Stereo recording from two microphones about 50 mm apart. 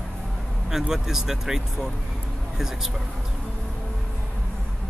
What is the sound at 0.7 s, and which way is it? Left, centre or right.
Speech, centre.